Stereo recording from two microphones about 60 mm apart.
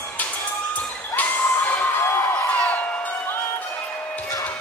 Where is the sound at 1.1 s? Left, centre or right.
Left.